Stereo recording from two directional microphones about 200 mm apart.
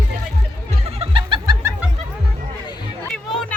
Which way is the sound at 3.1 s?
5° left (ahead or behind).